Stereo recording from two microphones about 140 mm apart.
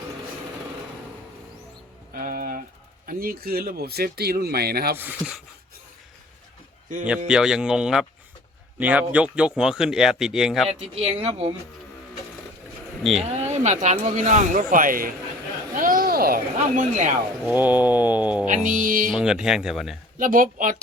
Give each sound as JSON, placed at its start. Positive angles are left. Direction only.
{"t": 2.1, "sound": "music", "side_deg": -90}
{"t": 3.1, "sound": "speech", "side_deg": -90}
{"t": 4.9, "sound": "speech", "side_deg": -10}
{"t": 7.3, "sound": "speech", "side_deg": -5}
{"t": 10.7, "sound": "speech", "side_deg": -45}
{"t": 13.0, "sound": "speech", "side_deg": 0}
{"t": 13.2, "sound": "speech", "side_deg": -55}
{"t": 15.7, "sound": "a sound", "side_deg": -80}
{"t": 17.5, "sound": "speech", "side_deg": -10}
{"t": 18.4, "sound": "music", "side_deg": -65}
{"t": 19.1, "sound": "speech", "side_deg": -5}
{"t": 20.1, "sound": "music", "side_deg": -75}